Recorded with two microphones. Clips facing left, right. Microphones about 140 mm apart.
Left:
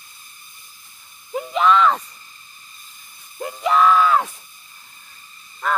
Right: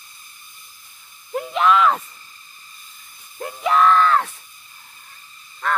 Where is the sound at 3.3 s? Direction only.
Centre (ahead or behind).